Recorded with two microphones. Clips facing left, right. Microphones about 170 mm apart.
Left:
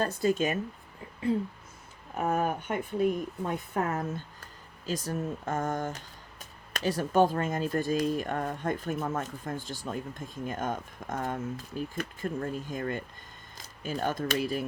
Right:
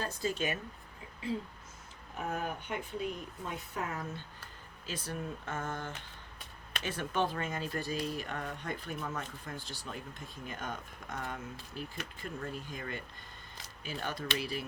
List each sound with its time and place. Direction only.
0.0 s speech: 50° left (ahead or behind)
2.1 s speech: 55° left (ahead or behind)